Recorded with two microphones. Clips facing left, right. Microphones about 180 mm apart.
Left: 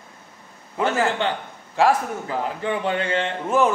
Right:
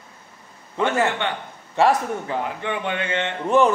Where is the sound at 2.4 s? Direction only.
35° left (ahead or behind).